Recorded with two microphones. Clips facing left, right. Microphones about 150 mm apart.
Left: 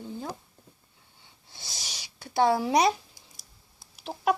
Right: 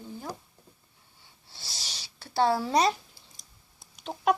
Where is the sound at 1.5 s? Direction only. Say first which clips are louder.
Left 1 dB; 15° left (ahead or behind).